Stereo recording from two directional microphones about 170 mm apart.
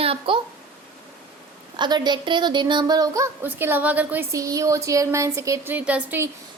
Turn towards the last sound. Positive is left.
turn(degrees=-10)  # may be behind; listen again after turning